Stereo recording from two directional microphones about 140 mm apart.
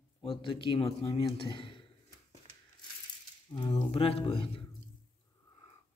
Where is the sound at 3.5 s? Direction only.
30° left (ahead or behind).